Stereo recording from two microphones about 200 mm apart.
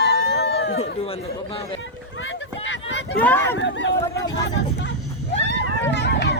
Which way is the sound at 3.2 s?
10° left (ahead or behind).